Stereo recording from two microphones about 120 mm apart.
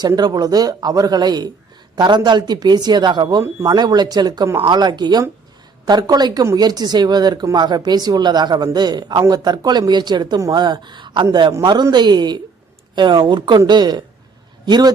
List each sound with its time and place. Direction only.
0.2 s a man's voice: 35° right (ahead or behind)